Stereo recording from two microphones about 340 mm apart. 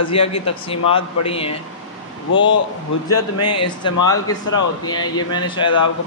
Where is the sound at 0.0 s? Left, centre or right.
Centre.